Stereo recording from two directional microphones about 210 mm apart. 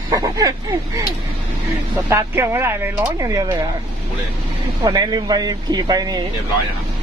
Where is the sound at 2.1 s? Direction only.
15° right (ahead or behind).